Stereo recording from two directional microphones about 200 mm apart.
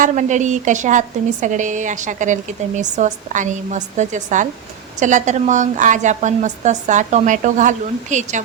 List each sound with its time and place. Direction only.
0.0 s a woman's voice: 40° right (ahead or behind)